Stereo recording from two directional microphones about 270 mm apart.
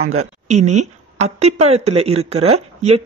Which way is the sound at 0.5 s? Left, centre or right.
Right.